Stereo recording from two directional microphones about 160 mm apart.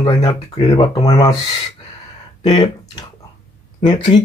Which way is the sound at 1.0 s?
20° left (ahead or behind).